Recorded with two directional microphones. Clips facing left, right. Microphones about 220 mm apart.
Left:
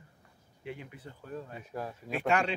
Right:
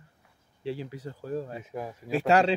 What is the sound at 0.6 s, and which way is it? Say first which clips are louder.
Speech: right 8 dB; 30° right (ahead or behind).